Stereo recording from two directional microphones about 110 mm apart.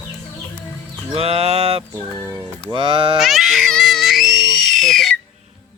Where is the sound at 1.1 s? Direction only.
60° right (ahead or behind).